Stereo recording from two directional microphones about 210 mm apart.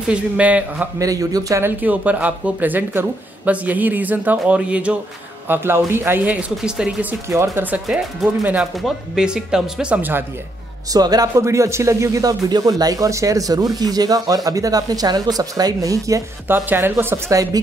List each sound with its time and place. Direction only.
0.1 s speech: 5° right (ahead or behind)